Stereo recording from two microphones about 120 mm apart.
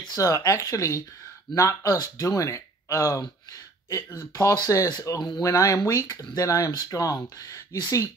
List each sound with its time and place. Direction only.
0.0 s speech: 30° left (ahead or behind)